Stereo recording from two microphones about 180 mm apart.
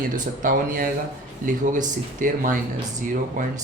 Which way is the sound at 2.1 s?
50° right (ahead or behind).